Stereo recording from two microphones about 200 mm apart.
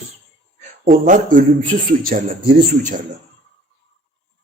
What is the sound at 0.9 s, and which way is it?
A man's voice, 40° right (ahead or behind).